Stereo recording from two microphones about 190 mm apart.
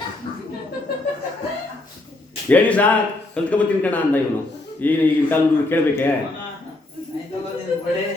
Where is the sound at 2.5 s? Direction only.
10° left (ahead or behind).